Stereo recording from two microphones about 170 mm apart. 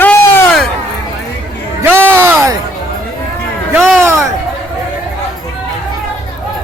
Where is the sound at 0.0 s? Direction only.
10° left (ahead or behind).